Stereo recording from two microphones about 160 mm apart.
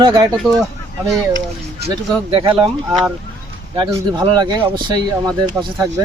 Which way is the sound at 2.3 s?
35° right (ahead or behind).